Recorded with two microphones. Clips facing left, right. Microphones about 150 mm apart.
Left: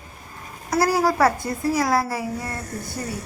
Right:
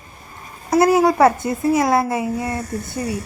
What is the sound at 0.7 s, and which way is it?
Speech, 20° right (ahead or behind).